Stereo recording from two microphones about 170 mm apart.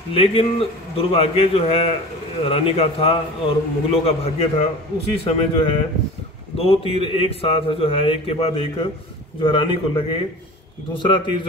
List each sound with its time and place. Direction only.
0.1 s a man's voice: 35° left (ahead or behind)